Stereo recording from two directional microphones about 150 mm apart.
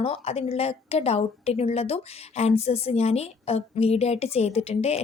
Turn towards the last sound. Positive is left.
turn(degrees=45)  # may be behind; listen again after turning